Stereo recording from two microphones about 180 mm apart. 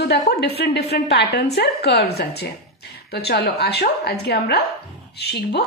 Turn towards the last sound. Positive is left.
turn(degrees=65)  # may be behind; listen again after turning